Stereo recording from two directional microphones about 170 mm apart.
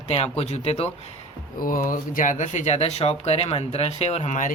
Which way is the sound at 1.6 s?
55° left (ahead or behind).